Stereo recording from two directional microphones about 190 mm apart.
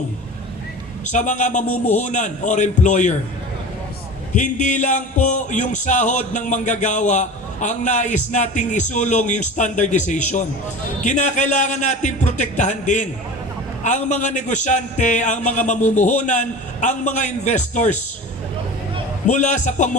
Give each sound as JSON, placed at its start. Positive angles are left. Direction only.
{"t": 1.0, "sound": "music", "side_deg": 40}
{"t": 4.4, "sound": "music", "side_deg": 40}
{"t": 19.3, "sound": "music", "side_deg": 40}